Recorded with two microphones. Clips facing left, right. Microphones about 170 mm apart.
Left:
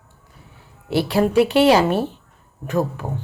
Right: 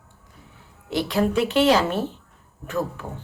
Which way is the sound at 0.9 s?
10° left (ahead or behind).